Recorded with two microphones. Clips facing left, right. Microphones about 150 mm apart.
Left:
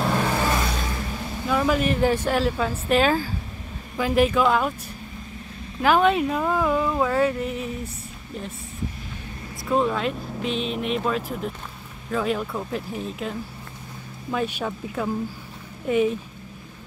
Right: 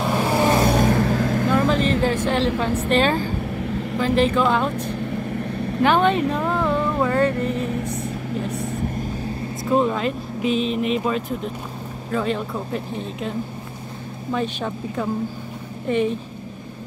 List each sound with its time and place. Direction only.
0.1 s vehicle: 20° right (ahead or behind)
0.6 s a sound: 60° right (ahead or behind); by 1.5 s 90° right
2.0 s a woman's voice: 5° left (ahead or behind)
9.7 s speech: centre (ahead or behind)
14.3 s a woman's voice: 5° left (ahead or behind)